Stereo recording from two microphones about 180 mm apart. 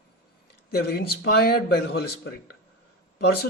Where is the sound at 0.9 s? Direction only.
60° left (ahead or behind).